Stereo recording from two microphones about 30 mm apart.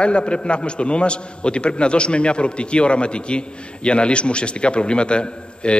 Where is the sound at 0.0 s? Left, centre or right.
Left.